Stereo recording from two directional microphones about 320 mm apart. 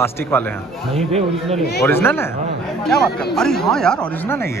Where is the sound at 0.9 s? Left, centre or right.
Centre.